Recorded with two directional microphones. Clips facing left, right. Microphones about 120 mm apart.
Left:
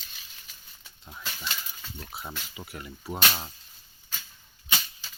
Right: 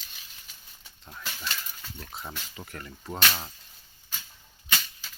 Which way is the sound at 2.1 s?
5° left (ahead or behind).